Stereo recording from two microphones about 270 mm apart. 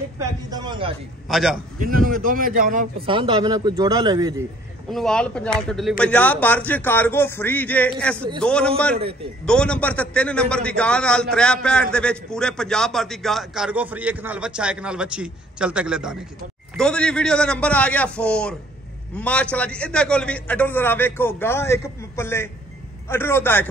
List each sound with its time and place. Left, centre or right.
0.2 s speech: centre
1.3 s a man's voice: centre
1.8 s speech: right
3.1 s speech: centre
4.9 s a man's voice: centre